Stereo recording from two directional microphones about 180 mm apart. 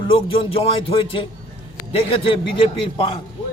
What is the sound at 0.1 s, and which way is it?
A man's voice, 30° left (ahead or behind).